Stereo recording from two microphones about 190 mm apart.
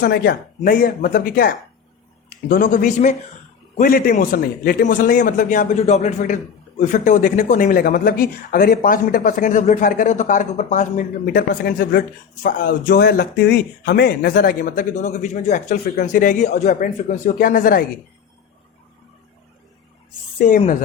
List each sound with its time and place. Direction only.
0.0 s a man's voice: 55° left (ahead or behind)
20.4 s a man's voice: 45° left (ahead or behind)